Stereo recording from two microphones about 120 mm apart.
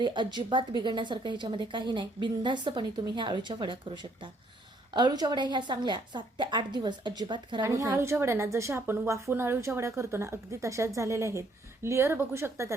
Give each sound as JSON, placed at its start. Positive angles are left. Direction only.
{"t": 0.0, "sound": "a woman's voice", "side_deg": -40}
{"t": 7.6, "sound": "a woman's voice", "side_deg": -25}